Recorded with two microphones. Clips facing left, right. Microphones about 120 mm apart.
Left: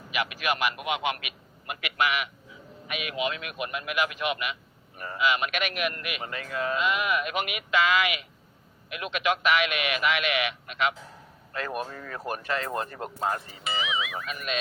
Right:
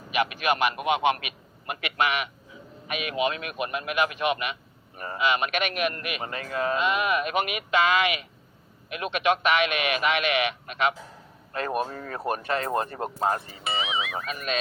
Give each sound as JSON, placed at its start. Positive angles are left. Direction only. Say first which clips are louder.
{"t": 0.1, "sound": "a man's voice", "louder": "right 4 dB", "side_deg": -30}